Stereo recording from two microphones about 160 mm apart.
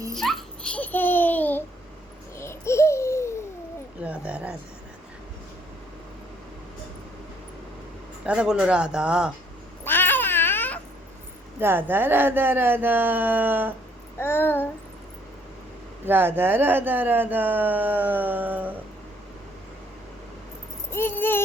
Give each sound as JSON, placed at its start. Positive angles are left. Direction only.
{"t": 0.2, "sound": "babbling", "side_deg": 0}
{"t": 4.0, "sound": "a sound", "side_deg": -10}
{"t": 8.2, "sound": "speech", "side_deg": -5}
{"t": 9.8, "sound": "cat", "side_deg": 15}
{"t": 11.6, "sound": "speech", "side_deg": -15}
{"t": 14.2, "sound": "a sound", "side_deg": 15}
{"t": 16.0, "sound": "speech", "side_deg": -15}
{"t": 20.9, "sound": "keys jangling", "side_deg": 15}